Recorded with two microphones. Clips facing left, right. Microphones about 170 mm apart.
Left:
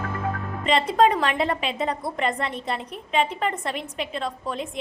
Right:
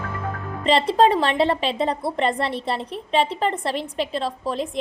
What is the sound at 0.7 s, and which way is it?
A woman's voice, 30° right (ahead or behind).